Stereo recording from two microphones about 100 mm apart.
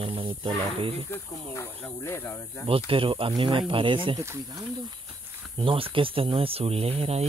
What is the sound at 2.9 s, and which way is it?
Speech, 60° right (ahead or behind).